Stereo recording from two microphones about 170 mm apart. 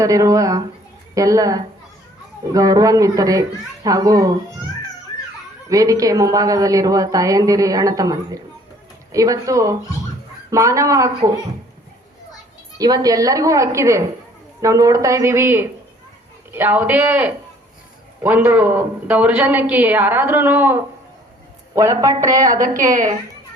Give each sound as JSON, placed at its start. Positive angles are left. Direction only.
{"t": 0.0, "sound": "a woman's voice", "side_deg": -20}
{"t": 5.6, "sound": "a woman's voice", "side_deg": -20}
{"t": 12.7, "sound": "a woman's voice", "side_deg": -20}